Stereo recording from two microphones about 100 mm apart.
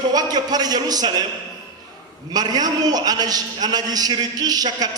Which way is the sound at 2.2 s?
40° right (ahead or behind).